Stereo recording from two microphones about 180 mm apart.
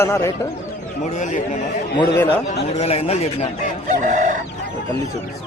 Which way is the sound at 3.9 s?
45° right (ahead or behind).